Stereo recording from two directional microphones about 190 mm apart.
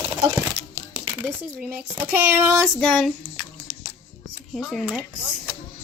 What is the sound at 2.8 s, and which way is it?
Speech, centre (ahead or behind).